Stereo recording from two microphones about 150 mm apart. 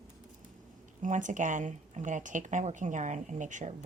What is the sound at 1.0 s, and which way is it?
Speech, 55° right (ahead or behind).